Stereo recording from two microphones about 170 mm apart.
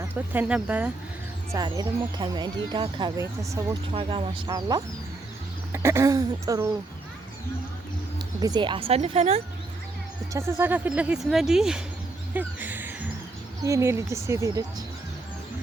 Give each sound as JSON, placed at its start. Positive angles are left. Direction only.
{"t": 0.0, "sound": "speech", "side_deg": -10}
{"t": 1.5, "sound": "speech", "side_deg": -25}
{"t": 3.9, "sound": "speech", "side_deg": -30}
{"t": 8.4, "sound": "speech", "side_deg": -25}
{"t": 10.3, "sound": "speech", "side_deg": -15}
{"t": 12.3, "sound": "music", "side_deg": -10}
{"t": 13.7, "sound": "speech", "side_deg": -15}